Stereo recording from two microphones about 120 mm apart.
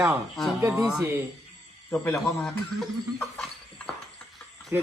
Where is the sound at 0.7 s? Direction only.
5° right (ahead or behind).